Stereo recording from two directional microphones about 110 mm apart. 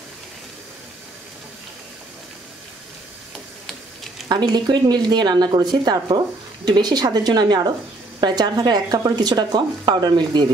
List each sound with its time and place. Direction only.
4.3 s speech: 40° right (ahead or behind)